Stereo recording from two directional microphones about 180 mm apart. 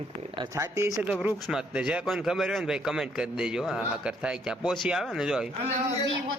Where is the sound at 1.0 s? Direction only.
5° right (ahead or behind).